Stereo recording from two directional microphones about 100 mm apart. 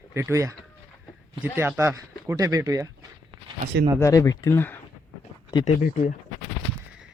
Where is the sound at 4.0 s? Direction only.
35° left (ahead or behind).